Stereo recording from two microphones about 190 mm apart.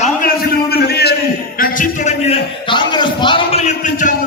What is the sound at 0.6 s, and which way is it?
Speech, 55° left (ahead or behind).